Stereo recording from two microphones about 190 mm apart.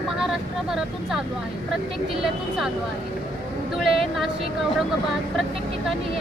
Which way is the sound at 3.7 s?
Centre (ahead or behind).